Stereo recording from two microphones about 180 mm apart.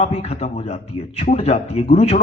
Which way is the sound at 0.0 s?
35° left (ahead or behind).